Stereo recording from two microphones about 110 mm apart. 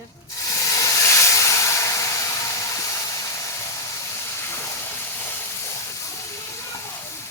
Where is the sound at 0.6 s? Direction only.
30° left (ahead or behind).